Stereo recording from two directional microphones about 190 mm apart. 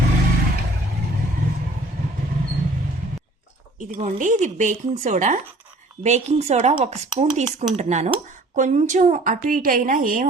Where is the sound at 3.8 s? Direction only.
40° right (ahead or behind).